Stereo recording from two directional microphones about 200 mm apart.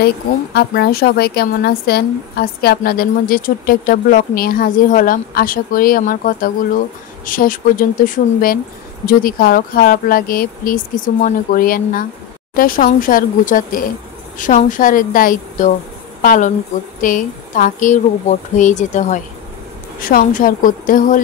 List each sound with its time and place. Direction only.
0.0 s a woman's voice: 55° left (ahead or behind)